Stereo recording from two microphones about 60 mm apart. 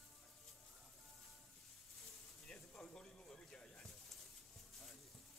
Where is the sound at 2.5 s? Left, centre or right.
Centre.